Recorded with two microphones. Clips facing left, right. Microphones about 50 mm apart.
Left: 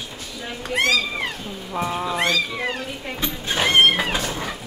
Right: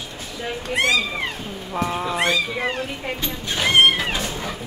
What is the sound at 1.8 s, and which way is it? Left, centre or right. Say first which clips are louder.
Speech: even; centre.